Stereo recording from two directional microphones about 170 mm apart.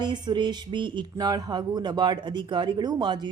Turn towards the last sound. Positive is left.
turn(degrees=-25)  # may be behind; listen again after turning